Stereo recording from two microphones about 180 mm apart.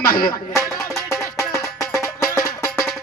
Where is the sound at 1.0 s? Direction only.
15° left (ahead or behind).